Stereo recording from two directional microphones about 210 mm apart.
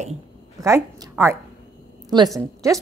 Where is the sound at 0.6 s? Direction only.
15° right (ahead or behind).